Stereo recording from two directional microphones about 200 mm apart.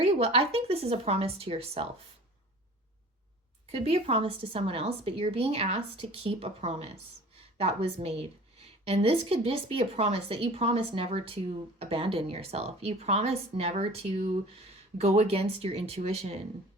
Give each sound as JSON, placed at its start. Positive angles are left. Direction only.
{"t": 0.0, "sound": "a woman's voice", "side_deg": -30}
{"t": 3.7, "sound": "a woman's voice", "side_deg": -30}